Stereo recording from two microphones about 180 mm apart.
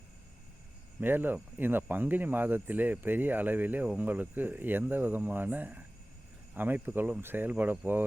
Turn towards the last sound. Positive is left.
turn(degrees=-10)  # may be behind; listen again after turning